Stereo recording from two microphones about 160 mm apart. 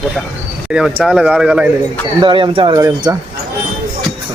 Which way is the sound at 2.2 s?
30° right (ahead or behind).